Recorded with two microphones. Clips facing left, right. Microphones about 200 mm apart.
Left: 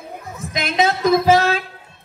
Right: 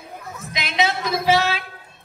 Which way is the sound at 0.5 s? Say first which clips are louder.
Left 4 dB; 50° left (ahead or behind).